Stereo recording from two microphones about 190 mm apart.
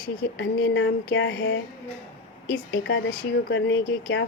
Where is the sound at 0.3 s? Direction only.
75° left (ahead or behind).